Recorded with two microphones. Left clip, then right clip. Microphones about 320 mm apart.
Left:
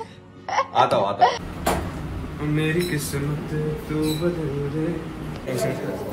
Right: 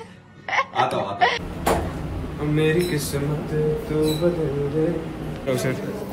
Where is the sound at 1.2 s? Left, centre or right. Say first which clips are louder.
Left 2 dB; centre.